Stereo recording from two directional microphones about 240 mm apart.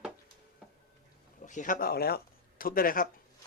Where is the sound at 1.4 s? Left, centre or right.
Left.